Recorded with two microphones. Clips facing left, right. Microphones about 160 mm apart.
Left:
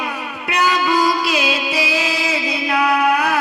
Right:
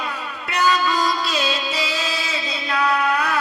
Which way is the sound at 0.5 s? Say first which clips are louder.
Left 2 dB; 10° left (ahead or behind).